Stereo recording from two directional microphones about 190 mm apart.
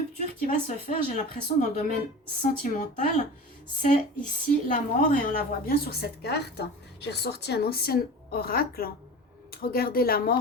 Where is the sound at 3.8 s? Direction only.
40° left (ahead or behind).